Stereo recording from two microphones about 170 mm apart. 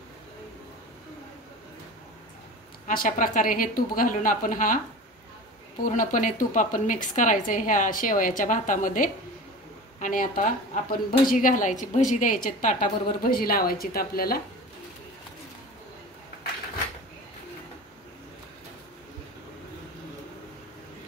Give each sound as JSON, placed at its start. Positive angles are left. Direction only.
{"t": 2.9, "sound": "a woman's voice", "side_deg": 55}
{"t": 5.8, "sound": "a woman's voice", "side_deg": 50}